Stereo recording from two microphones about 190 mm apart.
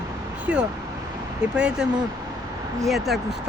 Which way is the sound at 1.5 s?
5° right (ahead or behind).